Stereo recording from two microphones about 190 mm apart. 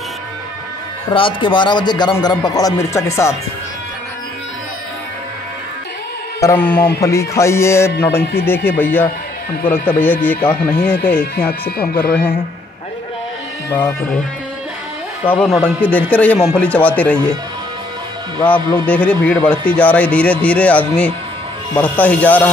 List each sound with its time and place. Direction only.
1.1 s speech: 25° left (ahead or behind)
6.4 s speech: 10° left (ahead or behind)
10.6 s speech: 55° left (ahead or behind)
13.7 s speech: 10° left (ahead or behind)
15.2 s speech: 10° left (ahead or behind)
18.4 s speech: 10° left (ahead or behind)